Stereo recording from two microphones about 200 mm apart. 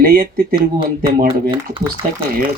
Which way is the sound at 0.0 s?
45° right (ahead or behind).